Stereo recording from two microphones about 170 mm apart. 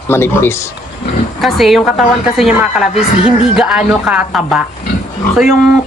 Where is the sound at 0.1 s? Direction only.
15° left (ahead or behind).